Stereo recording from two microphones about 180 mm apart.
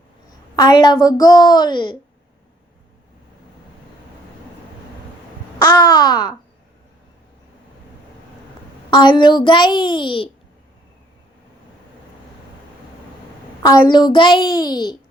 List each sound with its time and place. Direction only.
0.5 s a woman's voice: 20° left (ahead or behind)
5.5 s speech: 25° left (ahead or behind)
8.9 s a woman's voice: 25° left (ahead or behind)
13.6 s a woman's voice: 25° left (ahead or behind)